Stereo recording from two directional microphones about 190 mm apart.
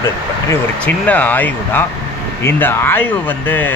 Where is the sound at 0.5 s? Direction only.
10° left (ahead or behind).